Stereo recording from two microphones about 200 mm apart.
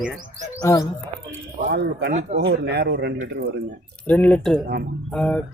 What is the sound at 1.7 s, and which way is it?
A man's voice, 55° right (ahead or behind).